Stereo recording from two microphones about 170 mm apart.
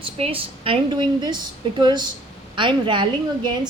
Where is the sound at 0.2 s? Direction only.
30° right (ahead or behind).